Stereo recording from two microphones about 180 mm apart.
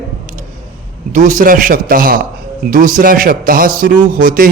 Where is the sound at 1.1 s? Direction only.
45° right (ahead or behind).